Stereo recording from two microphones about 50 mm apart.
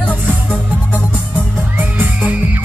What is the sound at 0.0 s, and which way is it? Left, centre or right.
Music, left.